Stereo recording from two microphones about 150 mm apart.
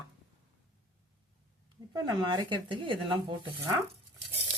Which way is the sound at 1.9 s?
25° right (ahead or behind).